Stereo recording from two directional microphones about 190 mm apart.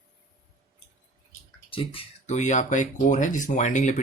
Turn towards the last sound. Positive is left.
turn(degrees=40)  # may be behind; listen again after turning